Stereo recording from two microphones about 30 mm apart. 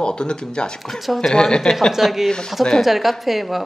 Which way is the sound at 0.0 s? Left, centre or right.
Left.